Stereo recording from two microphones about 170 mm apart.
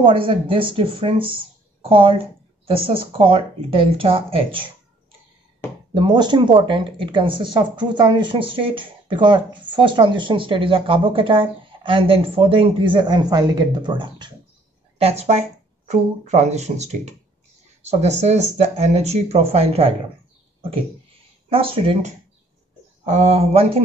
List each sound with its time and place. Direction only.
0.0 s speech: 30° right (ahead or behind)
5.9 s speech: 25° right (ahead or behind)
21.5 s speech: 35° right (ahead or behind)